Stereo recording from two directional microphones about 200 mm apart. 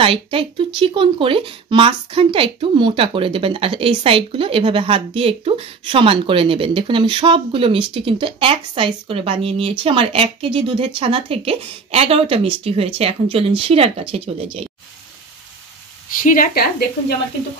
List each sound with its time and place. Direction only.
0.0 s speech: 25° right (ahead or behind)
16.2 s a woman's voice: 45° left (ahead or behind)